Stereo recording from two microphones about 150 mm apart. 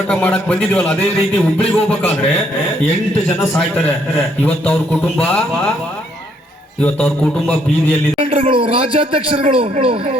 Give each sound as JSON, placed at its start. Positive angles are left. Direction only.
{"t": 0.1, "sound": "a man's voice", "side_deg": 5}
{"t": 3.5, "sound": "a man's voice", "side_deg": 10}
{"t": 6.8, "sound": "a man's voice", "side_deg": 5}
{"t": 8.2, "sound": "a man's voice", "side_deg": -40}